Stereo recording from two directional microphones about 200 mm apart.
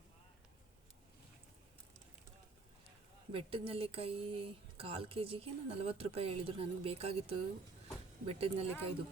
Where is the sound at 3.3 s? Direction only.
30° right (ahead or behind).